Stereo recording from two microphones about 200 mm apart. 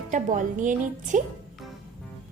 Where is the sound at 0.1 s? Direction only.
40° right (ahead or behind).